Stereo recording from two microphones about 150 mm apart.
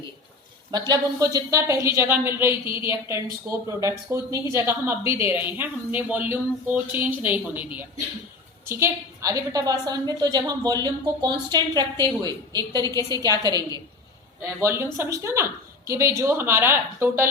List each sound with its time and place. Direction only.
0.7 s a woman's voice: 25° right (ahead or behind)